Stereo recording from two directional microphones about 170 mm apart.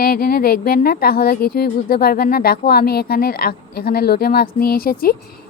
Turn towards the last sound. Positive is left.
turn(degrees=60)  # may be behind; listen again after turning